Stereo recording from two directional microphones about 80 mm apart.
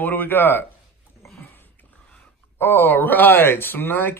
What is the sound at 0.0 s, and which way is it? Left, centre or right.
Speech, left.